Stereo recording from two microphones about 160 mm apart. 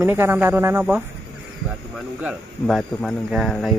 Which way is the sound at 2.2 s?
Centre (ahead or behind).